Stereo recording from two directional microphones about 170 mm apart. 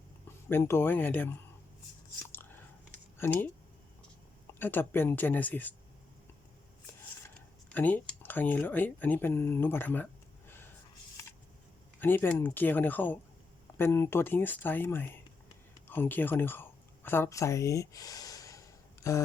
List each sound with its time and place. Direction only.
0.4 s speech: 15° left (ahead or behind)
3.2 s speech: 10° left (ahead or behind)
4.6 s speech: 10° left (ahead or behind)
7.7 s speech: 10° left (ahead or behind)
11.9 s speech: 10° left (ahead or behind)
15.9 s a sound: 10° left (ahead or behind)